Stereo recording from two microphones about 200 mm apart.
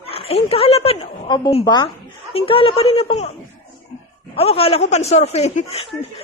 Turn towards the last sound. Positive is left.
turn(degrees=30)  # may be behind; listen again after turning